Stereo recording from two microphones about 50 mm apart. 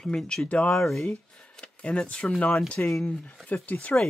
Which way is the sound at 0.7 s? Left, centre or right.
Centre.